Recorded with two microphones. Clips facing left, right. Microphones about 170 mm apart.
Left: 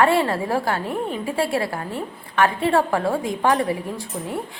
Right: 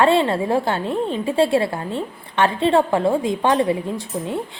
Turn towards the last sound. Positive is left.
turn(degrees=-20)  # may be behind; listen again after turning